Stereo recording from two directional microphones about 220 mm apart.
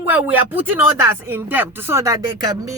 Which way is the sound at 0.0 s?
10° right (ahead or behind).